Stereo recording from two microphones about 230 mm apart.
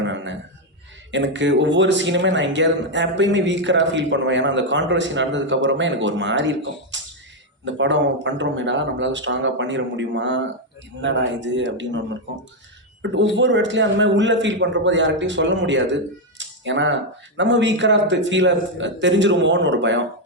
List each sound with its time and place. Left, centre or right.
0.0 s a sound: right
1.1 s speech: right
13.3 s speech: right